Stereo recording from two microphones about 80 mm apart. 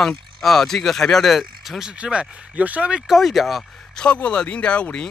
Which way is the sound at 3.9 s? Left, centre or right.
Centre.